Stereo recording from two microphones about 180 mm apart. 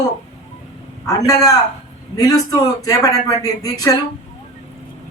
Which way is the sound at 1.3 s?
20° left (ahead or behind).